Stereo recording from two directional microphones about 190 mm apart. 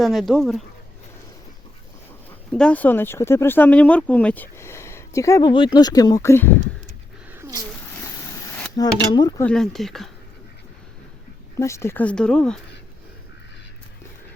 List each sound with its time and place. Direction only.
0.0 s speech: centre (ahead or behind)
2.5 s speech: 5° left (ahead or behind)
7.3 s cat: 15° right (ahead or behind)
8.7 s speech: 20° left (ahead or behind)
9.4 s speech: 5° left (ahead or behind)
11.5 s speech: 15° left (ahead or behind)